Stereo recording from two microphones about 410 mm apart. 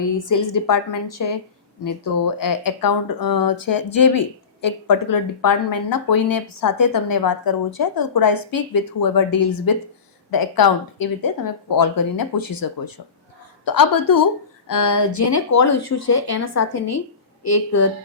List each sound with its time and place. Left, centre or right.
0.0 s speech: left